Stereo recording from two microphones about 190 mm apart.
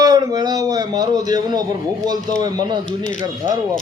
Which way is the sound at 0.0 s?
20° right (ahead or behind).